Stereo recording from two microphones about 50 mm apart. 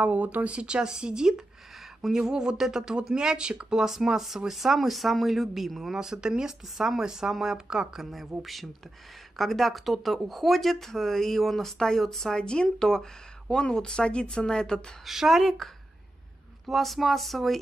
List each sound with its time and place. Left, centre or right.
0.0 s speech: right; by 5.9 s centre
5.9 s speech: centre
15.0 s speech: centre